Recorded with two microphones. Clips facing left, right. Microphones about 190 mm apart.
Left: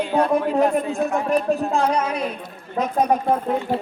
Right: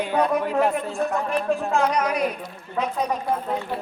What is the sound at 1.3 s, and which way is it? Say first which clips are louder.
Speech: left 3 dB; 40° left (ahead or behind).